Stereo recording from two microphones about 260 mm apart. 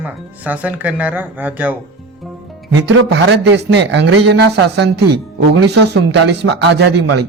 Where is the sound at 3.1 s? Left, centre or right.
Right.